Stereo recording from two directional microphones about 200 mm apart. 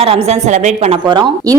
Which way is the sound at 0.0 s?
30° right (ahead or behind).